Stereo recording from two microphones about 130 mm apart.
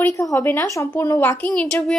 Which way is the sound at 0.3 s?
15° left (ahead or behind).